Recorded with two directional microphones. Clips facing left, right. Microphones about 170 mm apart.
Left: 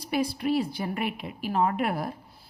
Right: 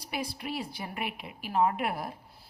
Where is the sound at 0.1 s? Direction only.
35° left (ahead or behind).